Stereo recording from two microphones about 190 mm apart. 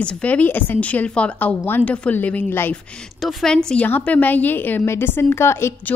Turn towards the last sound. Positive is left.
turn(degrees=15)  # may be behind; listen again after turning